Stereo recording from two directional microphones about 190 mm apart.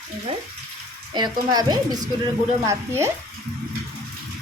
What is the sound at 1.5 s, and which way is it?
A woman's voice, 20° right (ahead or behind).